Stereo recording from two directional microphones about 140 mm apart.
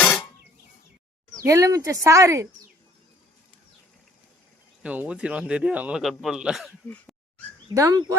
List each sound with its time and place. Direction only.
0.0 s a sound: 5° left (ahead or behind)
1.5 s speech: 20° right (ahead or behind)
4.8 s a man's voice: 10° right (ahead or behind)
7.7 s speech: 25° right (ahead or behind)